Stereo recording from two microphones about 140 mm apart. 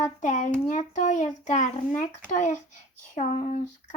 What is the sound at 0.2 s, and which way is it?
A child's voice, 65° left (ahead or behind).